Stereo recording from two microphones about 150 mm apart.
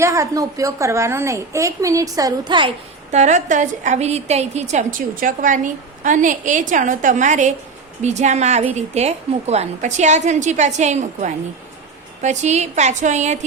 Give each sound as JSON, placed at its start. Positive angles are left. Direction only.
{"t": 0.0, "sound": "a woman's voice", "side_deg": -20}
{"t": 3.1, "sound": "a woman's voice", "side_deg": -50}